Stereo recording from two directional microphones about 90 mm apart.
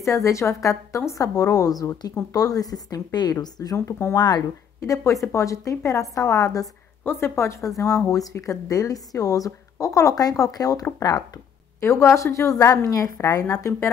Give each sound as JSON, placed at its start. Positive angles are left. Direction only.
{"t": 0.0, "sound": "a woman's voice", "side_deg": 35}
{"t": 3.7, "sound": "a woman's voice", "side_deg": 30}
{"t": 7.1, "sound": "a woman's voice", "side_deg": 25}
{"t": 11.8, "sound": "a woman's voice", "side_deg": 30}